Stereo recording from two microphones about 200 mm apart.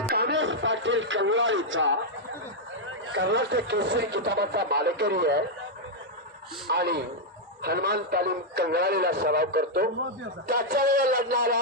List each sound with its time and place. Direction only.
0.1 s radio: 60° right (ahead or behind)
3.1 s speech: 60° right (ahead or behind)
6.7 s a man's voice: 55° right (ahead or behind)